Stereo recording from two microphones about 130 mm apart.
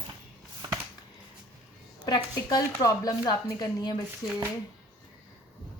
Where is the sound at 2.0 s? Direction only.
30° left (ahead or behind).